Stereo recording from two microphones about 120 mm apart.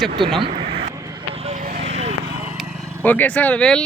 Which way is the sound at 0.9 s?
30° right (ahead or behind).